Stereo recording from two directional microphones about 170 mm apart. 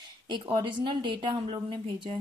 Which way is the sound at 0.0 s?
25° right (ahead or behind).